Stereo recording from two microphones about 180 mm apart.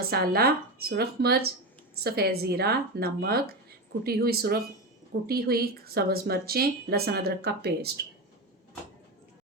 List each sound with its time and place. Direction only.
0.1 s speech: 55° right (ahead or behind)